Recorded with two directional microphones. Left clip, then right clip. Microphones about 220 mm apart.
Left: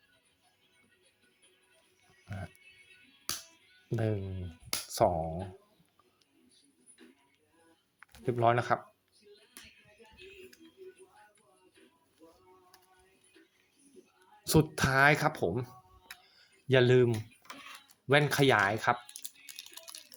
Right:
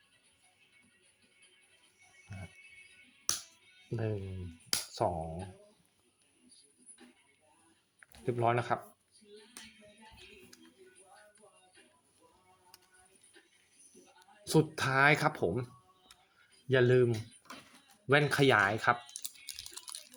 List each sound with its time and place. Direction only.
3.8 s speech: 20° left (ahead or behind)
4.9 s a sound: 20° left (ahead or behind)
8.2 s speech: 10° left (ahead or behind)
14.4 s speech: 15° left (ahead or behind)
16.6 s speech: 15° left (ahead or behind)
18.1 s typing: 5° left (ahead or behind)